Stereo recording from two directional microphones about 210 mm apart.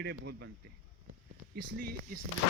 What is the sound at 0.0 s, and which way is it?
Speech, 50° right (ahead or behind).